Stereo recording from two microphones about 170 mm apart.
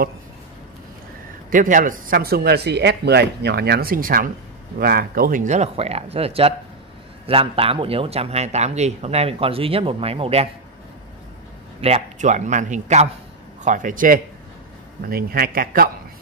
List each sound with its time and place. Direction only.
1.5 s a man's voice: 50° right (ahead or behind); by 10.5 s 35° right (ahead or behind)
11.8 s a man's voice: 40° right (ahead or behind); by 15.9 s 60° right (ahead or behind)